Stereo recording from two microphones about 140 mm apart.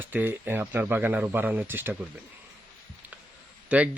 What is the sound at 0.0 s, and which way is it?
Speech, 15° right (ahead or behind).